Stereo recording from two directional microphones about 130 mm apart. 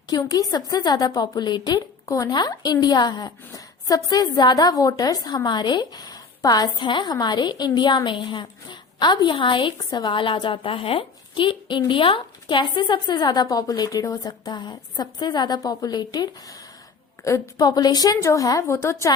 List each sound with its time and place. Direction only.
0.1 s a woman's voice: 30° left (ahead or behind)